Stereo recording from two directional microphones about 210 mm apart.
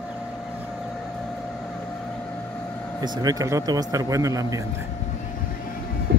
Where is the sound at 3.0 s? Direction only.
20° right (ahead or behind).